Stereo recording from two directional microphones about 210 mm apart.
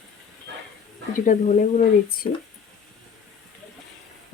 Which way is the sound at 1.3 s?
40° left (ahead or behind).